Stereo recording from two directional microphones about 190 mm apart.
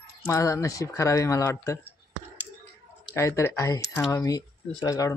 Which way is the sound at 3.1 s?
15° left (ahead or behind).